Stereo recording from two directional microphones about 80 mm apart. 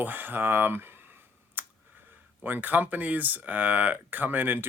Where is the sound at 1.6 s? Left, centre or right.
Right.